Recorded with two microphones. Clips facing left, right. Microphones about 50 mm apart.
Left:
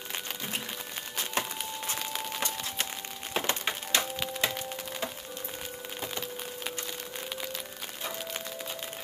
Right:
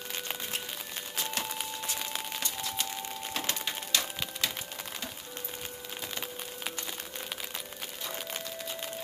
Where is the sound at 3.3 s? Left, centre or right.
Left.